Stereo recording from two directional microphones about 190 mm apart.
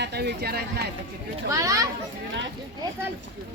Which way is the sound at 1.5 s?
15° right (ahead or behind).